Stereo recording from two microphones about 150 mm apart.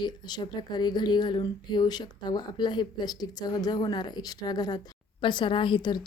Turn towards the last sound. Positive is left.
turn(degrees=30)  # may be behind; listen again after turning